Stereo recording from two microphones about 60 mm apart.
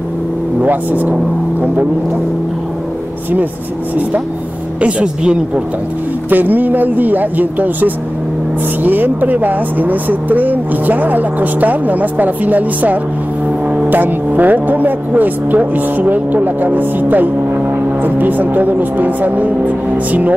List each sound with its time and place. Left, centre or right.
0.6 s speech: right
4.7 s speech: right
6.3 s speech: right